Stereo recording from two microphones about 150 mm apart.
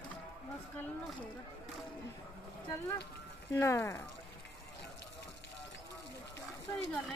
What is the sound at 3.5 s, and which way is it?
Speech, 15° left (ahead or behind).